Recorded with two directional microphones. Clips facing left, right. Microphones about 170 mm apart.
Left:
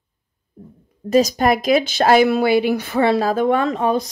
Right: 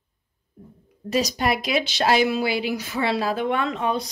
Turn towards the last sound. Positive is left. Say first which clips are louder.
# left 6 dB
turn(degrees=45)  # may be behind; listen again after turning